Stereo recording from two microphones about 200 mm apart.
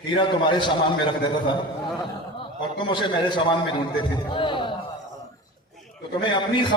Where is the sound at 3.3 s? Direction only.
25° left (ahead or behind).